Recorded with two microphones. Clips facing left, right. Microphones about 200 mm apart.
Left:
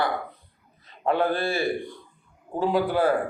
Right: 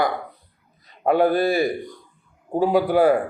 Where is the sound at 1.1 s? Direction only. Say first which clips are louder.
Right 6 dB; 10° right (ahead or behind).